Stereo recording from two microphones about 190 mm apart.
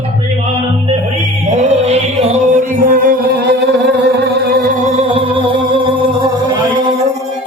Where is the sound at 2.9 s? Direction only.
45° right (ahead or behind).